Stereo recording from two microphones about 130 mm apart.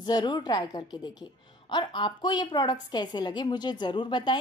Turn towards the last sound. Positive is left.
turn(degrees=35)  # may be behind; listen again after turning